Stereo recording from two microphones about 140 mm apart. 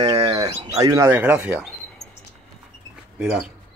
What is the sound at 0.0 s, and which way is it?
Bird, 45° right (ahead or behind).